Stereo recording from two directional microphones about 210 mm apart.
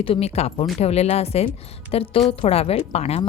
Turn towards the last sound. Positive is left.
turn(degrees=30)  # may be behind; listen again after turning